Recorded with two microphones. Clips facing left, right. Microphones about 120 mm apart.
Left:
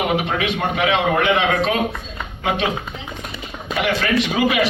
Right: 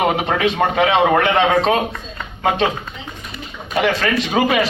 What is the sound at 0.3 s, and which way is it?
A man's voice, 35° right (ahead or behind).